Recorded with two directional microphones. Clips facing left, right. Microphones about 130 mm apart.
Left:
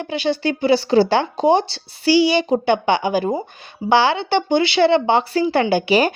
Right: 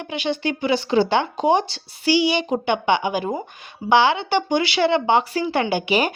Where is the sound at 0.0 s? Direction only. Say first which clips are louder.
Left 4 dB; 35° left (ahead or behind).